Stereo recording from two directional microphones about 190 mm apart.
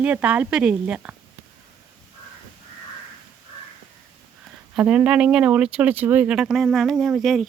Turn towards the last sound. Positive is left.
turn(degrees=0)  # may be behind; listen again after turning